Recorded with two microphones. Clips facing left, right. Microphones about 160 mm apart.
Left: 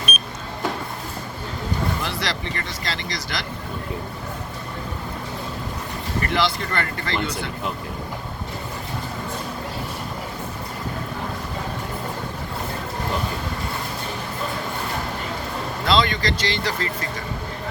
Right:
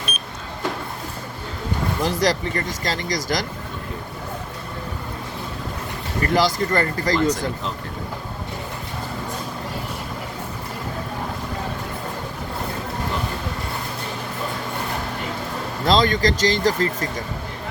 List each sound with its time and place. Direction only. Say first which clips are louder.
2.0 s speech: right 7 dB; 40° right (ahead or behind)
6.2 s speech: right 5 dB; 40° right (ahead or behind)
15.9 s speech: right 3 dB; 40° right (ahead or behind)